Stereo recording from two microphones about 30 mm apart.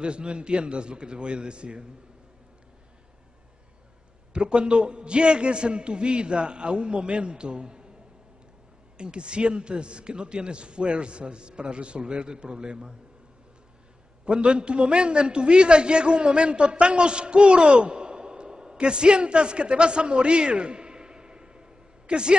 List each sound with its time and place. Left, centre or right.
0.0 s a man's voice: right
4.3 s a man's voice: right
8.9 s a man's voice: right
14.2 s a man's voice: right
17.9 s a sound: right
18.8 s a man's voice: right